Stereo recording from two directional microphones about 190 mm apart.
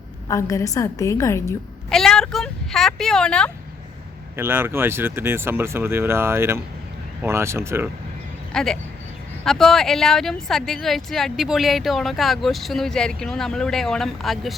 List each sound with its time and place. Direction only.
0.3 s a woman's voice: 15° left (ahead or behind)
1.9 s speech: 5° left (ahead or behind)
4.4 s speech: 10° right (ahead or behind)
8.5 s speech: 5° left (ahead or behind)